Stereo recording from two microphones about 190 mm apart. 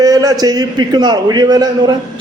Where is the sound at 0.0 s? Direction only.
20° right (ahead or behind).